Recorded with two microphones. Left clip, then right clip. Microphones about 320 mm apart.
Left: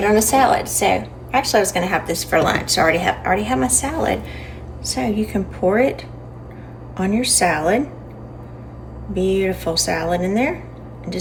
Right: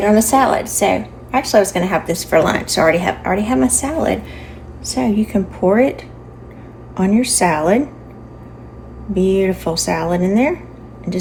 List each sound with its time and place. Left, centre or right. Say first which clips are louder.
0.0 s a woman's voice: right 2 dB; centre
9.1 s speech: right 3 dB; centre